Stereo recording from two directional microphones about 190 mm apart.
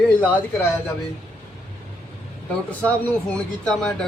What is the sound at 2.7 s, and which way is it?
A man's voice, 10° left (ahead or behind).